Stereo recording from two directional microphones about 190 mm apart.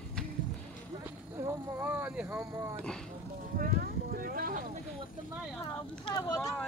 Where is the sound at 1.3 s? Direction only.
15° right (ahead or behind).